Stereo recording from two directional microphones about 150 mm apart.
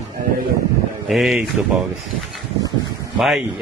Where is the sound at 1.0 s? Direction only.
Centre (ahead or behind).